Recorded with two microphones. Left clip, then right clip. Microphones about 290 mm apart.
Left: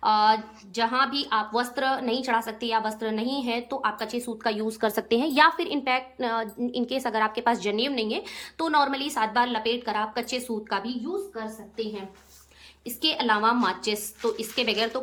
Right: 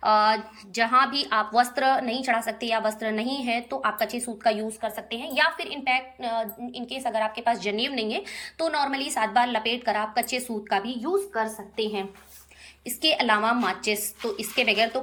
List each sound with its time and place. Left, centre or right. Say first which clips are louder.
0.0 s a woman's voice: even; centre
12.8 s a woman's voice: right 3 dB; centre